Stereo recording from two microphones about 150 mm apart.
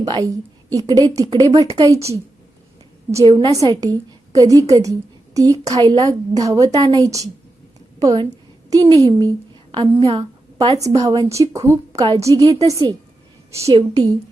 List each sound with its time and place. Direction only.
0.0 s a woman's voice: 25° right (ahead or behind)
3.2 s a woman's voice: 30° right (ahead or behind)